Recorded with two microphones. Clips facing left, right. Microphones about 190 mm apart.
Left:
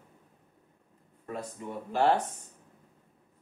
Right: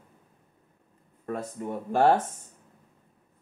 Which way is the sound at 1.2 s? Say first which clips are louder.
Right 5 dB; 50° right (ahead or behind).